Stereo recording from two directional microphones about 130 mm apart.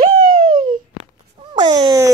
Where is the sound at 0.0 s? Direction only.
90° right.